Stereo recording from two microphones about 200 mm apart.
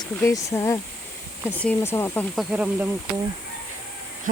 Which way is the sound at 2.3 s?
5° right (ahead or behind).